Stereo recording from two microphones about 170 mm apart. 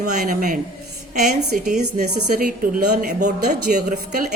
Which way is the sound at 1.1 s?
65° right (ahead or behind).